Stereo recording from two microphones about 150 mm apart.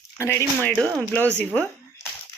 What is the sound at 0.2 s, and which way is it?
Speech, 15° left (ahead or behind).